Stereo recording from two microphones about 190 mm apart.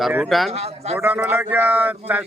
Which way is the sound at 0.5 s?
35° right (ahead or behind).